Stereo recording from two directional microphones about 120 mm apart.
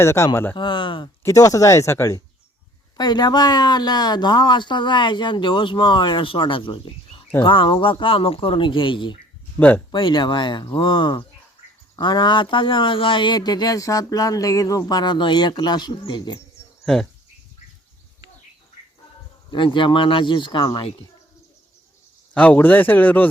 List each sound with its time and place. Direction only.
0.0 s speech: 25° left (ahead or behind)
0.5 s speech: 40° left (ahead or behind)
1.2 s speech: 30° left (ahead or behind)
3.0 s speech: 35° left (ahead or behind)
9.6 s a man's voice: 15° left (ahead or behind)
9.9 s speech: 40° left (ahead or behind)
16.8 s speech: 5° left (ahead or behind)
19.5 s speech: 40° left (ahead or behind)
22.4 s a man's voice: 10° left (ahead or behind)